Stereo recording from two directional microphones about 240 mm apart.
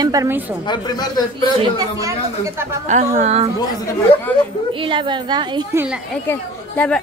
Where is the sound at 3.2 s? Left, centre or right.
Right.